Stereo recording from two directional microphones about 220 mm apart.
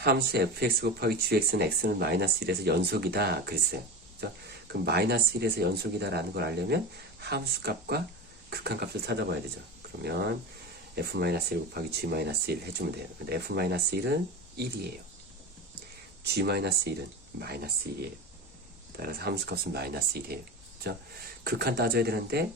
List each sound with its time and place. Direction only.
0.0 s speech: 45° right (ahead or behind)
16.2 s speech: 50° right (ahead or behind)
18.9 s speech: 45° right (ahead or behind)
21.4 s speech: 45° right (ahead or behind)